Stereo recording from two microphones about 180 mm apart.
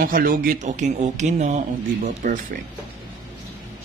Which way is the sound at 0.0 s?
50° right (ahead or behind).